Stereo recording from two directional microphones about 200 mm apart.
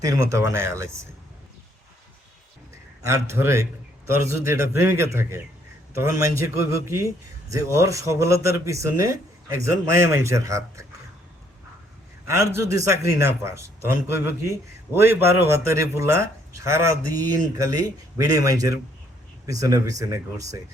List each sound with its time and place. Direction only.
0.0 s speech: 15° right (ahead or behind)
3.0 s speech: 15° right (ahead or behind)
12.3 s speech: 15° right (ahead or behind)